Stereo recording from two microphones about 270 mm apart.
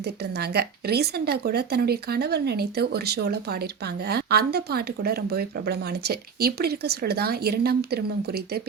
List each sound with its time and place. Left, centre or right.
0.0 s speech: right